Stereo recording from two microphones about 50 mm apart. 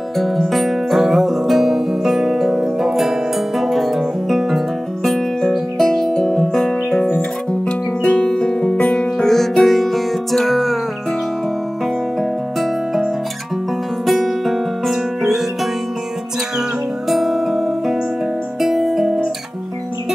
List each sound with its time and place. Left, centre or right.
0.2 s music: centre
7.2 s music: left
9.2 s music: centre
12.2 s music: centre
14.0 s music: centre
17.1 s music: centre